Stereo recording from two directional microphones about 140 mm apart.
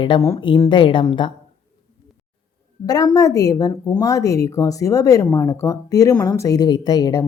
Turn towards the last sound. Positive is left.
turn(degrees=30)  # may be behind; listen again after turning